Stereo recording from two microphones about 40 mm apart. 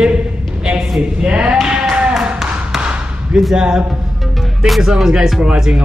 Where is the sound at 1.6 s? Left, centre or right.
Right.